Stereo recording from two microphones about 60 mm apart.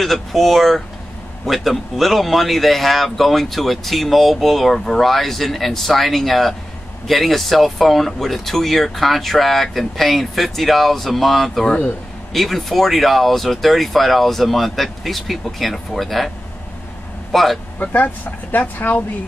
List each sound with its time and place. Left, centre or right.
0.0 s speech: centre
17.3 s speech: centre
17.7 s speech: left